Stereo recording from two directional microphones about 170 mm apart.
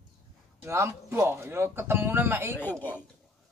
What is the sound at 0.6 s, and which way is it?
Speech, 15° right (ahead or behind).